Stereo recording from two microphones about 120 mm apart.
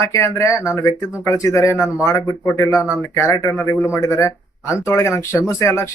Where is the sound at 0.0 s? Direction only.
25° left (ahead or behind).